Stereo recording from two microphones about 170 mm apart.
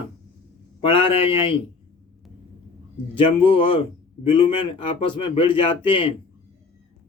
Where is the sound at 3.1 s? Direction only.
30° left (ahead or behind).